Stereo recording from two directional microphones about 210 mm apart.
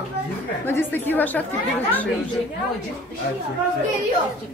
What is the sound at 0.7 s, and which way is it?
Speech, 10° left (ahead or behind).